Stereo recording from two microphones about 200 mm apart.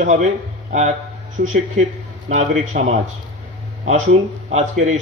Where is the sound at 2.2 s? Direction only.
35° right (ahead or behind).